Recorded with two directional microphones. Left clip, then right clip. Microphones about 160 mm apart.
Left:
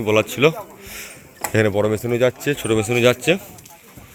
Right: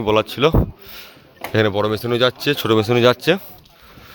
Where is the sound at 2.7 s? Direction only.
40° right (ahead or behind).